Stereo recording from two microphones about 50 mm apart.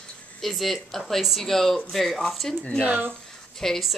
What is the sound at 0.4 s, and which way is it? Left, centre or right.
Speech, centre.